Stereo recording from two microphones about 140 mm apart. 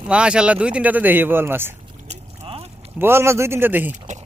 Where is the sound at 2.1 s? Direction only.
45° right (ahead or behind).